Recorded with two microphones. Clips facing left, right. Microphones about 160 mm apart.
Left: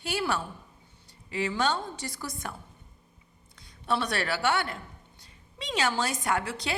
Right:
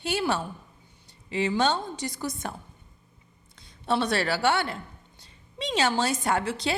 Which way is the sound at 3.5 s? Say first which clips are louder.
Right 3 dB; 25° right (ahead or behind).